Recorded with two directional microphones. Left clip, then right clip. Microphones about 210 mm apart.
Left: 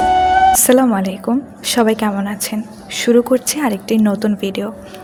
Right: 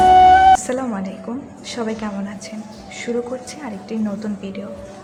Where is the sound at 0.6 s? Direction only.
40° left (ahead or behind).